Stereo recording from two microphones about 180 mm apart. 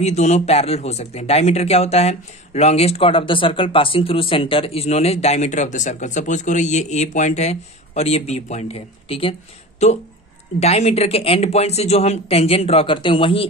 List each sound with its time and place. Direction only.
0.0 s speech: 40° left (ahead or behind)
10.6 s speech: 35° left (ahead or behind)